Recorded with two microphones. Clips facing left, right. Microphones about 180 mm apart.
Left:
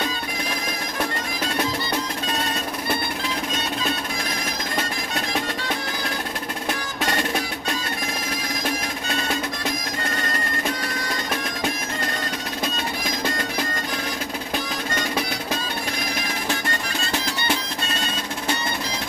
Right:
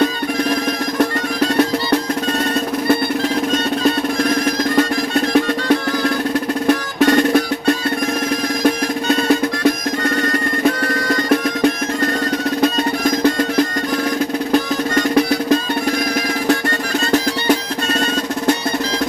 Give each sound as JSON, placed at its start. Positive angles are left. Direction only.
{"t": 6.7, "sound": "percussion", "side_deg": -55}